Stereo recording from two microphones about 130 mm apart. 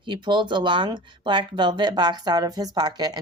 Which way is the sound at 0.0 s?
35° right (ahead or behind).